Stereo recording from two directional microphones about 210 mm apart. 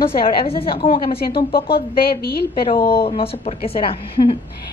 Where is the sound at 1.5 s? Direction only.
45° left (ahead or behind).